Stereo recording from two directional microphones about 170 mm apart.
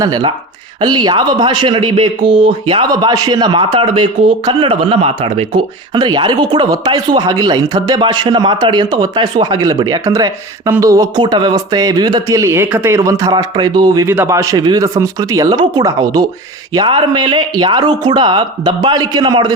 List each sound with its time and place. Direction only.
0.0 s speech: 25° right (ahead or behind)